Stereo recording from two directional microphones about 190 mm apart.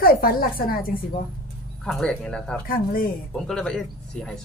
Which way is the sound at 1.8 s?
5° left (ahead or behind).